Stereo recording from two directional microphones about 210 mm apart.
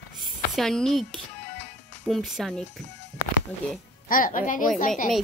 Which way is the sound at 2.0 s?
Centre (ahead or behind).